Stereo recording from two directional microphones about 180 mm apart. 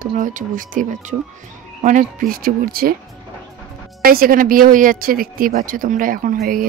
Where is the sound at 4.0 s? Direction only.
55° right (ahead or behind).